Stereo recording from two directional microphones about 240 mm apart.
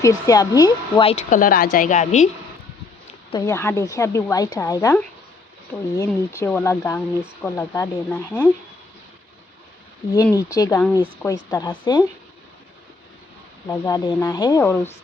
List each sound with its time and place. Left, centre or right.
0.0 s speech: centre; by 2.3 s left
3.3 s a woman's voice: centre
5.7 s speech: centre
6.4 s a woman's voice: centre
10.2 s a woman's voice: centre
11.5 s a woman's voice: centre
13.7 s a woman's voice: centre